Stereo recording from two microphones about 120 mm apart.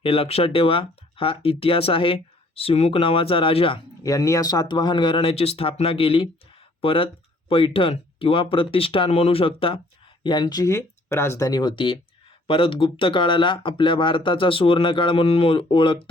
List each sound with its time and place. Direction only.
0.0 s speech: 55° left (ahead or behind)
4.0 s speech: 25° left (ahead or behind); by 9.7 s 50° left (ahead or behind)
10.2 s speech: 35° left (ahead or behind)
10.7 s speech: 25° left (ahead or behind); by 16.0 s 45° left (ahead or behind)